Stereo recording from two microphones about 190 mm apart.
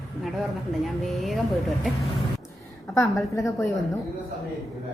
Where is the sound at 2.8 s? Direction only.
15° left (ahead or behind).